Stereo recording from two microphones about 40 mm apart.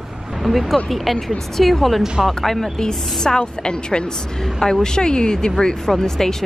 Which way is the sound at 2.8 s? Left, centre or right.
Centre.